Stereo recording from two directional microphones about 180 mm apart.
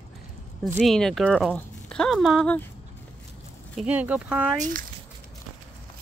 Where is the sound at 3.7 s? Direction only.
10° right (ahead or behind).